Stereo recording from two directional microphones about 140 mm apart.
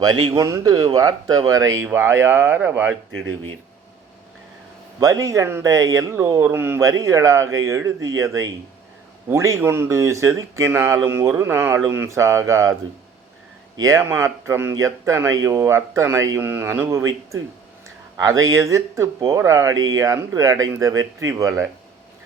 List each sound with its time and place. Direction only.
0.0 s speech: 30° right (ahead or behind); by 2.9 s 15° right (ahead or behind)
4.9 s speech: 25° right (ahead or behind)
13.7 s speech: 20° right (ahead or behind)